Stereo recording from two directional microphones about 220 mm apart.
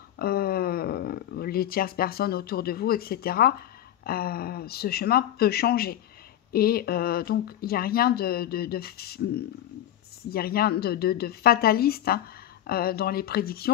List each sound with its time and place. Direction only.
0.2 s speech: 45° left (ahead or behind)